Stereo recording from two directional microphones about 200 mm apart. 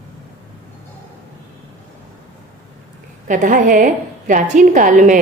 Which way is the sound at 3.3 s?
40° right (ahead or behind).